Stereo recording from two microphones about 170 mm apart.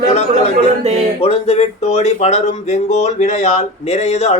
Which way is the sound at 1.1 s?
35° left (ahead or behind).